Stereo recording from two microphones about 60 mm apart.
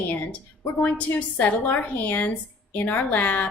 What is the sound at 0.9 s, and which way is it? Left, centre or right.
A woman's voice, left.